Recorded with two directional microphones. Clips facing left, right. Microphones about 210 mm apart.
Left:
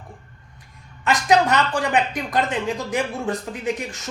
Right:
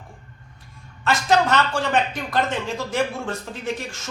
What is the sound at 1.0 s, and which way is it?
Speech, 15° left (ahead or behind).